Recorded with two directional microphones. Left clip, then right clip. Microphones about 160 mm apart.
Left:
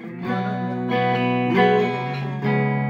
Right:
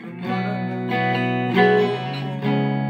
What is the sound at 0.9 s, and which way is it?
Music, 30° right (ahead or behind).